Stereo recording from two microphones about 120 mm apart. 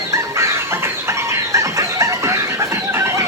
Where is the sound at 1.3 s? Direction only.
25° right (ahead or behind).